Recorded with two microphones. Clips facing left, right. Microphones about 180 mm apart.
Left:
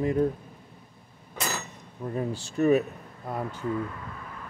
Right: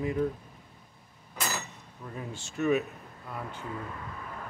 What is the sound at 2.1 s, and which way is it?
Speech, 35° left (ahead or behind).